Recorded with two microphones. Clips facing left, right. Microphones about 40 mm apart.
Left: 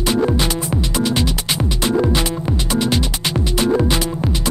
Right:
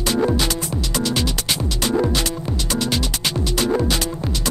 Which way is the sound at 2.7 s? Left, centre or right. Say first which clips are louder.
Left 3 dB; centre.